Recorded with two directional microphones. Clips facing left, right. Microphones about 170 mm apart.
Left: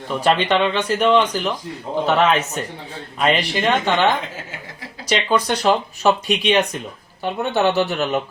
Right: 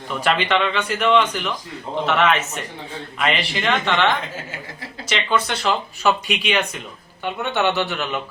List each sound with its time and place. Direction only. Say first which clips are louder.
0.3 s speech: left 3 dB; 30° left (ahead or behind)